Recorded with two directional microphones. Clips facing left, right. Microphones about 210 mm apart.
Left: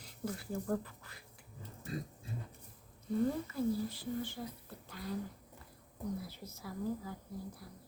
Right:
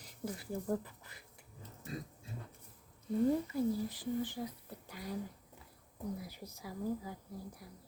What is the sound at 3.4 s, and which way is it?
Speech, 15° right (ahead or behind).